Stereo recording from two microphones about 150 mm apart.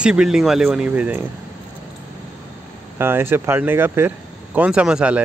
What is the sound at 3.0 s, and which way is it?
Speech, 15° right (ahead or behind).